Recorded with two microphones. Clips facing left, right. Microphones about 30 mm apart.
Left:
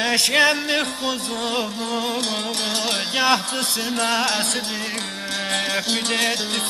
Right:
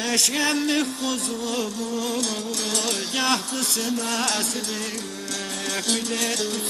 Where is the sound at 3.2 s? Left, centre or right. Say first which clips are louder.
Left 5 dB; left.